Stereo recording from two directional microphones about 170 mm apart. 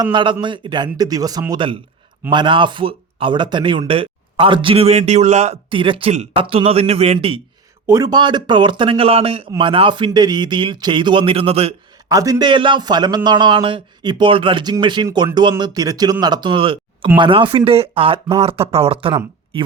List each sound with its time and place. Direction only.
0.0 s a man's voice: 30° right (ahead or behind)
7.9 s a man's voice: 20° right (ahead or behind); by 11.7 s 35° right (ahead or behind)
12.0 s a man's voice: 20° right (ahead or behind)